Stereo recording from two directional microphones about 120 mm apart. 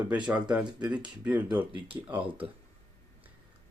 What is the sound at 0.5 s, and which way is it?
Speech, 10° right (ahead or behind).